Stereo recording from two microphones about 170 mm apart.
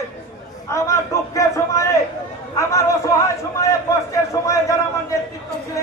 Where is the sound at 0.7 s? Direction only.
15° left (ahead or behind).